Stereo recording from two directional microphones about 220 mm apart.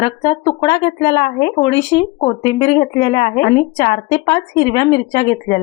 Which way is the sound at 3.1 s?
20° left (ahead or behind).